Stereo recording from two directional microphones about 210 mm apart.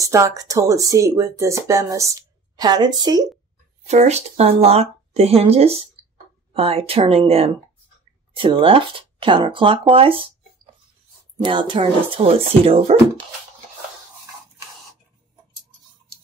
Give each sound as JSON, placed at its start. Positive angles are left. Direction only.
{"t": 0.0, "sound": "speech", "side_deg": -15}
{"t": 3.8, "sound": "speech", "side_deg": -35}
{"t": 11.4, "sound": "speech", "side_deg": -25}